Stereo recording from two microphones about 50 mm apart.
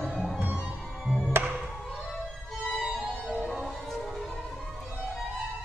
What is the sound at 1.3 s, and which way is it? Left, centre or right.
Music, right.